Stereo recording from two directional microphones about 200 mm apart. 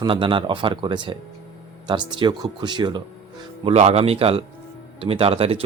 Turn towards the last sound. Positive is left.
turn(degrees=-30)  # may be behind; listen again after turning